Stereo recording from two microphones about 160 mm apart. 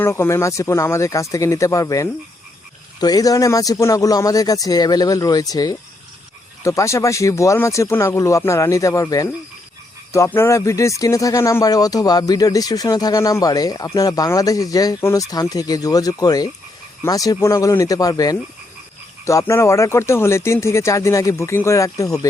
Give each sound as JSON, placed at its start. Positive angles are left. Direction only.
{"t": 0.0, "sound": "speech", "side_deg": 15}